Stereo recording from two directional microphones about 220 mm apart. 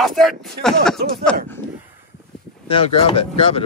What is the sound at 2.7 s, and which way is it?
Speech, 25° left (ahead or behind).